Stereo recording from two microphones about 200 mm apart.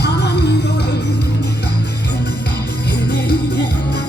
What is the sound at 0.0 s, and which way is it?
Music, 55° left (ahead or behind).